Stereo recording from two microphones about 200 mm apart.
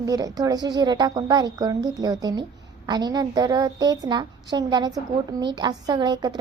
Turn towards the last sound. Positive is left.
turn(degrees=-20)  # may be behind; listen again after turning